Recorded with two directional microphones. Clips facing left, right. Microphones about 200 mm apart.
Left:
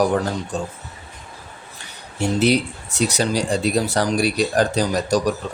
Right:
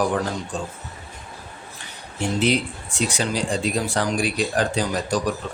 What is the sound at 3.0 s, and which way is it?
Speech, 40° left (ahead or behind).